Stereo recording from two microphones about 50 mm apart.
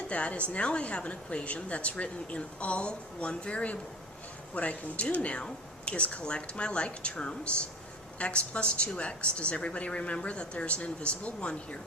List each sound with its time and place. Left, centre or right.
0.1 s a woman's voice: left